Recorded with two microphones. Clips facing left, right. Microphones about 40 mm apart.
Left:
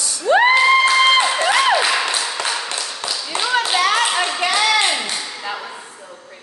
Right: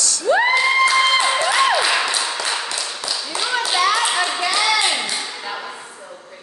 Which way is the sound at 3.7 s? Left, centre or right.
Left.